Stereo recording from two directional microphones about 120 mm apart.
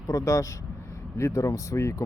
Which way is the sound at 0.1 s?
25° left (ahead or behind).